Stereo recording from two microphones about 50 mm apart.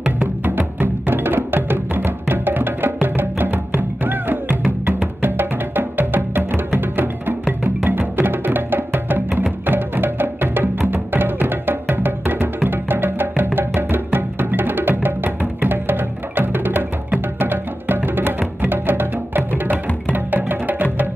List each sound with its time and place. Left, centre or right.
0.5 s music: right